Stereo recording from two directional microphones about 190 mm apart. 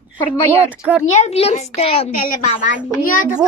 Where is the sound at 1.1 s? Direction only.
35° left (ahead or behind).